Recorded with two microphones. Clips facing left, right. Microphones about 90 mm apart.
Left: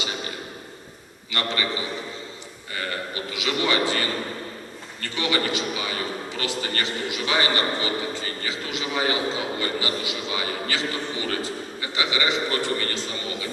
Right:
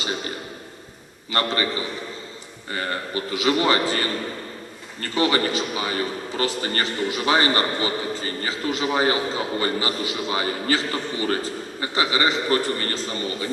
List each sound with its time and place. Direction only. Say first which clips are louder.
1.3 s a man's voice: right 4 dB; 35° right (ahead or behind)
3.3 s a man's voice: right 4 dB; 40° right (ahead or behind)
5.1 s a man's voice: right 4 dB; 40° right (ahead or behind)